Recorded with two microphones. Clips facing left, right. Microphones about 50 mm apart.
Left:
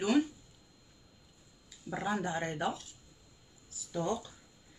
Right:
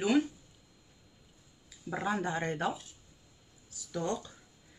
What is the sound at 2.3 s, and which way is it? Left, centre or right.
Speech, centre.